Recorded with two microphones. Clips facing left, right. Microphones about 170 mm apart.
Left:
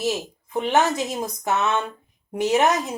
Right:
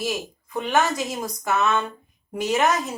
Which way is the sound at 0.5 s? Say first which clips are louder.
Left 2 dB; 20° left (ahead or behind).